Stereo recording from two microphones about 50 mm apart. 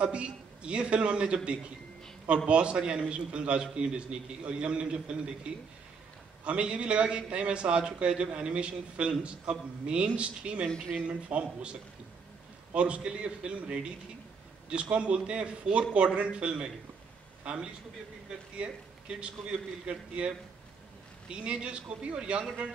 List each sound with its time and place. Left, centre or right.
0.0 s a man's voice: right
10.7 s speech: centre
11.1 s a man's voice: right
12.7 s a man's voice: right